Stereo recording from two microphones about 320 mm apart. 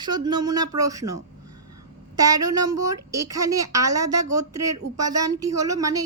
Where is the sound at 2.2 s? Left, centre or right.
Centre.